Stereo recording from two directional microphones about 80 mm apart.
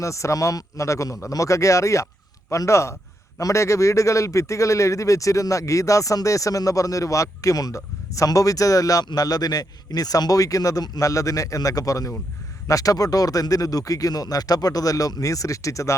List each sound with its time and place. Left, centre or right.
0.0 s a man's voice: left